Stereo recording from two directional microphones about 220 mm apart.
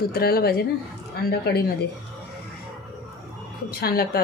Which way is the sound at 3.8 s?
45° left (ahead or behind).